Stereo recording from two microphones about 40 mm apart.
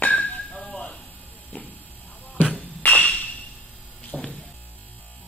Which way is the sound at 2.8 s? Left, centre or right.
Left.